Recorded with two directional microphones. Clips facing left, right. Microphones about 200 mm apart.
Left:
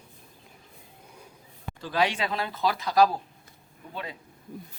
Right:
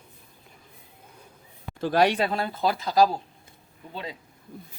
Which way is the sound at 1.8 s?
65° right (ahead or behind).